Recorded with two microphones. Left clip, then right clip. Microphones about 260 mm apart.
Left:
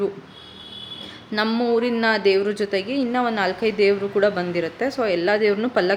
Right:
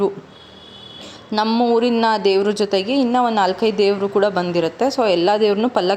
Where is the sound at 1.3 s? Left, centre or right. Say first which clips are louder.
Right 4 dB; centre.